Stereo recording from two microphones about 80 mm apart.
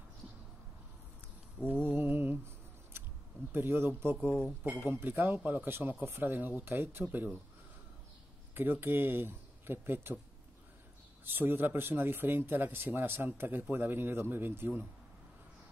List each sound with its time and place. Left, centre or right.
1.9 s mantra: right
3.5 s speech: right
4.6 s speech: centre
8.5 s speech: right
11.2 s speech: right